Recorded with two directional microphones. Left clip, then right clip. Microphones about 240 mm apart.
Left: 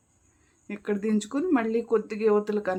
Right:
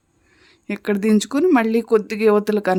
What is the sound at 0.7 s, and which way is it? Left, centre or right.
Speech, right.